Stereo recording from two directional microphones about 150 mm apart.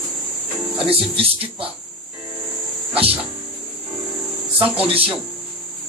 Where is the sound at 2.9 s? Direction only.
40° right (ahead or behind).